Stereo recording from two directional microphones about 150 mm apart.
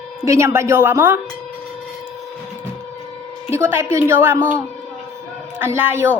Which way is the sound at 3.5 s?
15° right (ahead or behind).